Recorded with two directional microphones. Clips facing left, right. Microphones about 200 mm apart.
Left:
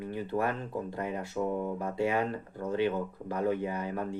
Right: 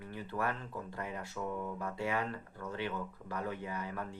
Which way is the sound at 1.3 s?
35° left (ahead or behind).